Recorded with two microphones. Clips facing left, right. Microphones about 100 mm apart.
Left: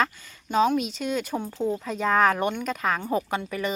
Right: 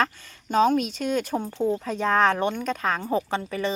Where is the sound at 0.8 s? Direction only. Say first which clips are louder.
Right 2 dB; centre (ahead or behind).